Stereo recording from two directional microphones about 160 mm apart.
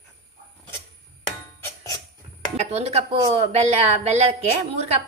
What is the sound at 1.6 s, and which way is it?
Music, 20° left (ahead or behind).